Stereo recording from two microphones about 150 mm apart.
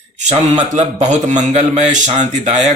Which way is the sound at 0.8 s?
55° right (ahead or behind).